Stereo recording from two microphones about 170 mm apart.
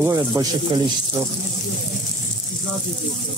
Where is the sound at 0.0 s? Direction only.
20° right (ahead or behind).